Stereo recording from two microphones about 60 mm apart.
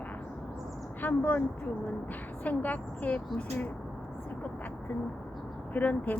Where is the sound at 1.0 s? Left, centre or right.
Left.